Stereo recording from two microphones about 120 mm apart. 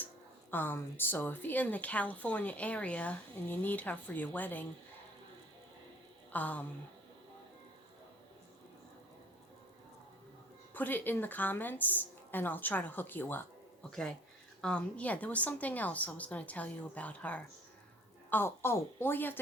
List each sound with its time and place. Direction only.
0.5 s a woman's voice: 15° left (ahead or behind)
6.3 s a woman's voice: 15° left (ahead or behind)
10.8 s a woman's voice: 15° left (ahead or behind)
14.6 s a woman's voice: 10° left (ahead or behind)